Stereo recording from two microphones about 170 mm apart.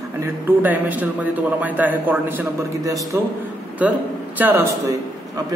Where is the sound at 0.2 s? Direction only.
10° right (ahead or behind).